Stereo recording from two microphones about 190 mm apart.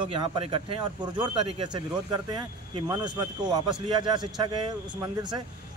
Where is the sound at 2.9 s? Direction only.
20° right (ahead or behind).